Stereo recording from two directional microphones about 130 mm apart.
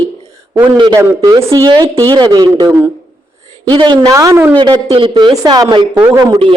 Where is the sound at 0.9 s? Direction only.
25° right (ahead or behind).